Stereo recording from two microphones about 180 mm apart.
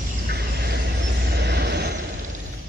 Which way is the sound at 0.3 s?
65° right (ahead or behind).